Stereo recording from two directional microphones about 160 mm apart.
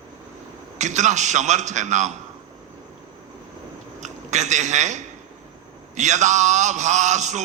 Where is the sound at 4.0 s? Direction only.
45° right (ahead or behind).